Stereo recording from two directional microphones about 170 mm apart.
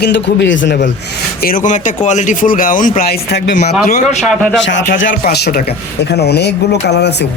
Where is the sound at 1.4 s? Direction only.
55° left (ahead or behind); by 3.5 s 80° left.